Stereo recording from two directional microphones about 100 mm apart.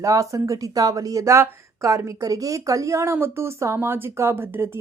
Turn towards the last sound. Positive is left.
turn(degrees=-25)  # may be behind; listen again after turning